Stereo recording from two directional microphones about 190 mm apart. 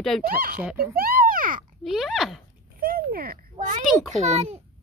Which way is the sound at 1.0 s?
50° right (ahead or behind).